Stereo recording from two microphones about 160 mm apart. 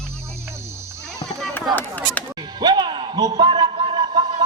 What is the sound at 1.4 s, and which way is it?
Chop, 5° left (ahead or behind).